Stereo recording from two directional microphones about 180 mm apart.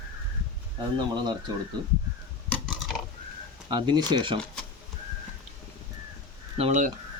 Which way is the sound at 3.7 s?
25° right (ahead or behind).